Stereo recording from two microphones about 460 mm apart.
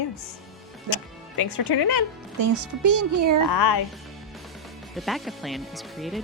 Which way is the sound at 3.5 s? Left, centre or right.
Left.